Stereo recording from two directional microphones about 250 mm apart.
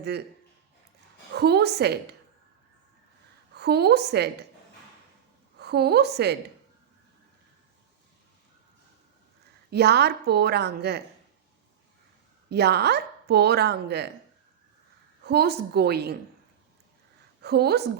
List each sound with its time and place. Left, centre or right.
1.3 s speech: right
3.5 s a woman's voice: right
5.5 s a woman's voice: right
9.6 s speech: right
12.5 s speech: right
15.2 s speech: right
17.4 s a woman's voice: right